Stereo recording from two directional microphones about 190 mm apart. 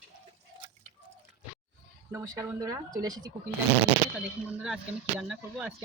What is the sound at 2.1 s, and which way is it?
Speech, 15° right (ahead or behind).